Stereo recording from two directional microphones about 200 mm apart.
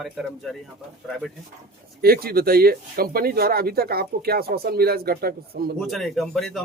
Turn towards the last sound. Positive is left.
turn(degrees=0)  # may be behind; listen again after turning